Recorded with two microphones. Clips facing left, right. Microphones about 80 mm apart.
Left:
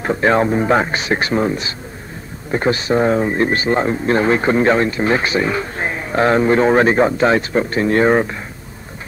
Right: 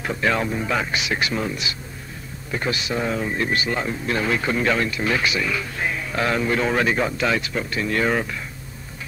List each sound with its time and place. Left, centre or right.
0.0 s speech: left